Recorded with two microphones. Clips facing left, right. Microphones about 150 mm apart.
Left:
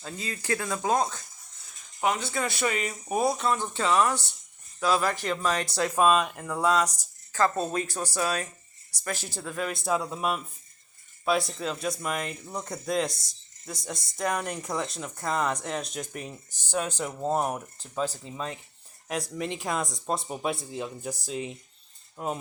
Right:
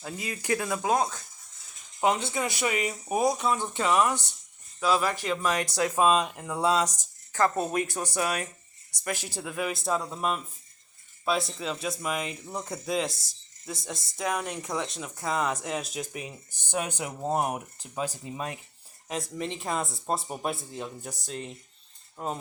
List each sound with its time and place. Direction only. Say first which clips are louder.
0.0 s speech: right 1 dB; 15° right (ahead or behind)
2.0 s speech: right 2 dB; 25° right (ahead or behind)
19.0 s speech: left 1 dB; centre (ahead or behind)